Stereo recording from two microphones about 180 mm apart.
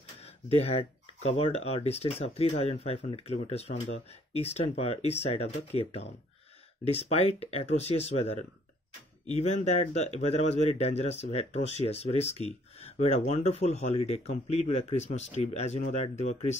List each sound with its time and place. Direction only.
0.5 s speech: 35° left (ahead or behind)